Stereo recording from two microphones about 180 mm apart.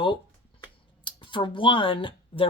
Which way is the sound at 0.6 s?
25° left (ahead or behind).